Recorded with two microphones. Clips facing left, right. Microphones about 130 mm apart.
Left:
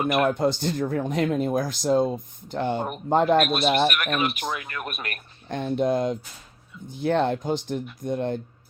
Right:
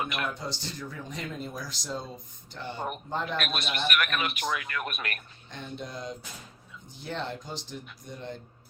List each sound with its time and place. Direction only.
0.0 s a man's voice: 40° left (ahead or behind)
0.3 s a man's voice: 55° left (ahead or behind); by 5.2 s 35° left (ahead or behind)
5.5 s speech: 60° left (ahead or behind)